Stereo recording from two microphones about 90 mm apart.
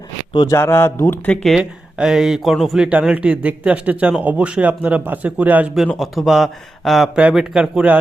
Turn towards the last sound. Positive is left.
turn(degrees=-10)  # may be behind; listen again after turning